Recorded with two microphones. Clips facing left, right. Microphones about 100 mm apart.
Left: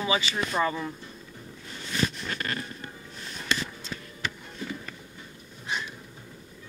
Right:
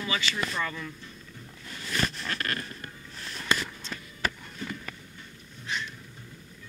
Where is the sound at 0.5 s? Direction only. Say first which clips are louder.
Left 6 dB; 35° left (ahead or behind).